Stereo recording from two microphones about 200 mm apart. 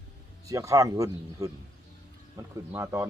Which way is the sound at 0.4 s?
15° right (ahead or behind).